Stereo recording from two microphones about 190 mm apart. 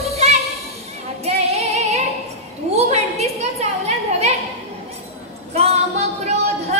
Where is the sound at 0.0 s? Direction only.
35° right (ahead or behind).